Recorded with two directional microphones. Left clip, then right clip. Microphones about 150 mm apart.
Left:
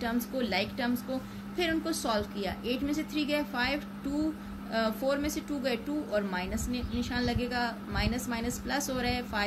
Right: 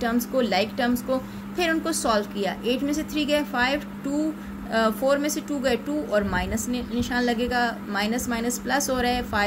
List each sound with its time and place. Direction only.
0.0 s speech: 35° right (ahead or behind)